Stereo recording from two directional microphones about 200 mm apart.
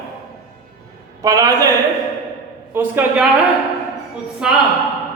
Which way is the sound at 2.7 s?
10° right (ahead or behind).